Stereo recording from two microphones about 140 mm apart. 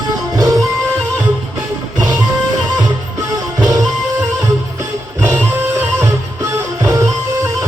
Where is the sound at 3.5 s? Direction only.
25° right (ahead or behind).